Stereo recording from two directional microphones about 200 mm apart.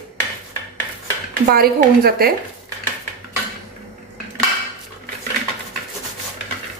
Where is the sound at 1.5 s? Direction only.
50° right (ahead or behind).